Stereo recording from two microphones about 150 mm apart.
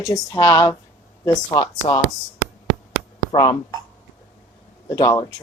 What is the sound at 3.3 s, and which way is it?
Speech, 25° left (ahead or behind).